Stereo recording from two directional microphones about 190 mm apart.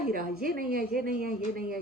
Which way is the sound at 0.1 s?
50° right (ahead or behind).